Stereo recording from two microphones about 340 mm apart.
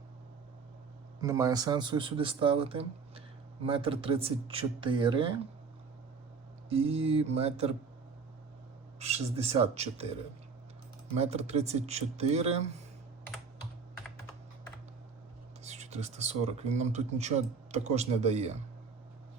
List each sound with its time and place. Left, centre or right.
1.2 s speech: centre
6.7 s speech: centre
9.0 s speech: centre
11.2 s speech: centre
15.6 s speech: centre